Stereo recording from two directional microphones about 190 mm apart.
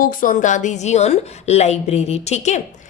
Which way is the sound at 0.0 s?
45° left (ahead or behind).